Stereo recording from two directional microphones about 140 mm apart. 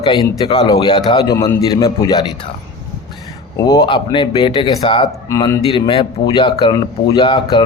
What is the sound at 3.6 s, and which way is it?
Speech, 25° left (ahead or behind).